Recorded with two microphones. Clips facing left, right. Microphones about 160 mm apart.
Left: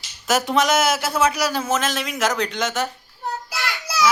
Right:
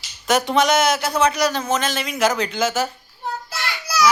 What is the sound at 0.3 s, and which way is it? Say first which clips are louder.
A man's voice: right 2 dB; centre (ahead or behind).